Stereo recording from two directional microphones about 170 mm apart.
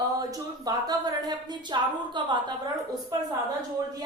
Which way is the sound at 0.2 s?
20° right (ahead or behind).